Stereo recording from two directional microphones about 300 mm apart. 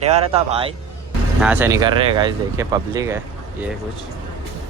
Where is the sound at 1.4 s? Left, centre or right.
Centre.